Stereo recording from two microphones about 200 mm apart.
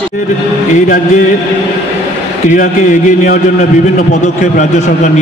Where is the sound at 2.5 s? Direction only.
40° left (ahead or behind).